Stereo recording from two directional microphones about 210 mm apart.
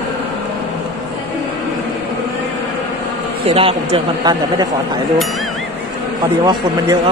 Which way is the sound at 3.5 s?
25° right (ahead or behind).